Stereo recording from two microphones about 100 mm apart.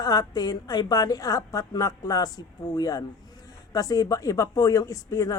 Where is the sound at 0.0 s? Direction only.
40° left (ahead or behind).